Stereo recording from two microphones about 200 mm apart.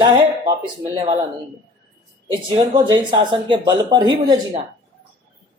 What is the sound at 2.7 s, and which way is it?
Speech, 20° right (ahead or behind).